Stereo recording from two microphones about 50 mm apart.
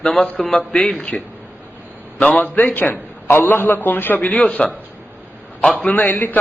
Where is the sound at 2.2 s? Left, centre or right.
Left.